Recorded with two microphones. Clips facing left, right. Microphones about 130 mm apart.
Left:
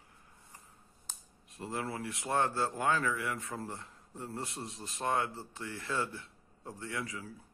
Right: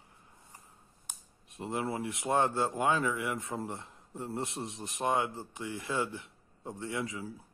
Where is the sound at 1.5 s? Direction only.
20° right (ahead or behind).